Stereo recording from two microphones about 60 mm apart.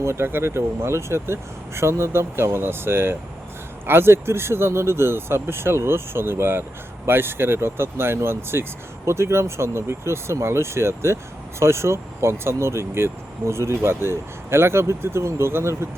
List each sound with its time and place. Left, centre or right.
0.0 s speech: right